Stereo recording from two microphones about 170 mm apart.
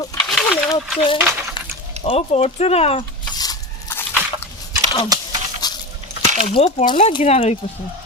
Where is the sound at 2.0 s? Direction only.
40° left (ahead or behind).